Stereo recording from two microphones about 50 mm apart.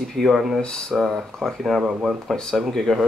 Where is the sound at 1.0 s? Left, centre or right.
Centre.